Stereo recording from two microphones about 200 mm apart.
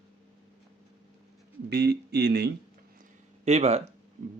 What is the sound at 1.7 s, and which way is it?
Speech, 55° right (ahead or behind).